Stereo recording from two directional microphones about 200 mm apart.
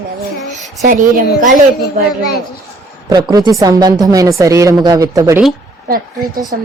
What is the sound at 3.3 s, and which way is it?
A woman's voice, 20° right (ahead or behind).